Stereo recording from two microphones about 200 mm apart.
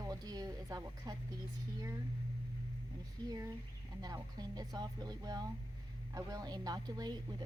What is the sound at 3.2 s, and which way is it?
A woman's voice, 15° right (ahead or behind).